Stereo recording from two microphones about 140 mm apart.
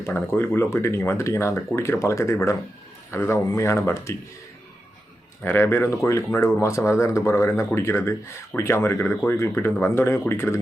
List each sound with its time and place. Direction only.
0.0 s speech: 15° left (ahead or behind)
5.4 s speech: 15° left (ahead or behind)